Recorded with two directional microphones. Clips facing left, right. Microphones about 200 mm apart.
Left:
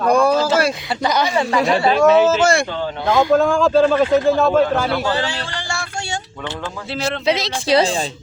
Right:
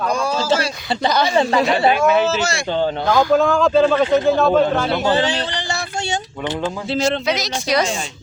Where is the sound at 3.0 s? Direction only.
25° left (ahead or behind).